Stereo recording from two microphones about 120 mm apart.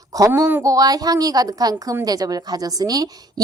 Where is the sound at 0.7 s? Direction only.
30° right (ahead or behind).